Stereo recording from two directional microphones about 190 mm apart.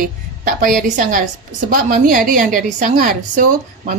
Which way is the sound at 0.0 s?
45° right (ahead or behind).